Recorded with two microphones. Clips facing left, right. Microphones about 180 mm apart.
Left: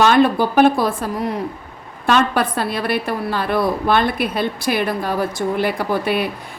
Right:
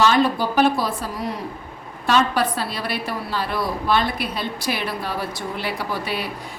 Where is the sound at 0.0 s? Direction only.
55° left (ahead or behind).